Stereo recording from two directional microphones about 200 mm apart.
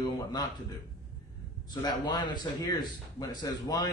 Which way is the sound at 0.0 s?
20° left (ahead or behind).